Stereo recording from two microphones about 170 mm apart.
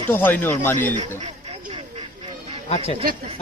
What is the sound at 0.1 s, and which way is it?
Speech, 10° left (ahead or behind).